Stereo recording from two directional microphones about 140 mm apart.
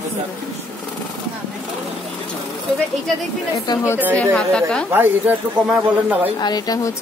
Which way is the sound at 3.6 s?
25° left (ahead or behind).